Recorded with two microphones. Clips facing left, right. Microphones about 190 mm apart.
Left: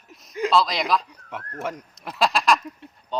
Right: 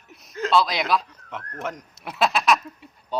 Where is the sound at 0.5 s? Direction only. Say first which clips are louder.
Right 1 dB; centre (ahead or behind).